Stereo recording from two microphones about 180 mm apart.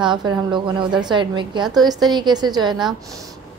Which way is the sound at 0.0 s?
25° right (ahead or behind).